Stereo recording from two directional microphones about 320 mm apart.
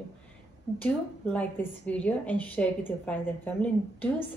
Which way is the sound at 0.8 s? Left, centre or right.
Centre.